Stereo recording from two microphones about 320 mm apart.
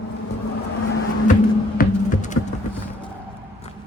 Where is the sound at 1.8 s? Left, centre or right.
Left.